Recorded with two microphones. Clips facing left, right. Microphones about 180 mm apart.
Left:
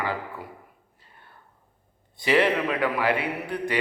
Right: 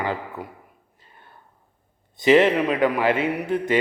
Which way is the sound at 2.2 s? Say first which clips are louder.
Right 6 dB; 20° right (ahead or behind).